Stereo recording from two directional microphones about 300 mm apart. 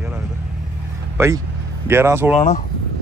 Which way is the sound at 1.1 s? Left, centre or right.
Centre.